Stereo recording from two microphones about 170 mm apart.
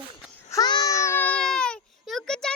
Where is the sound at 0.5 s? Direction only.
25° left (ahead or behind); by 2.5 s 5° left (ahead or behind).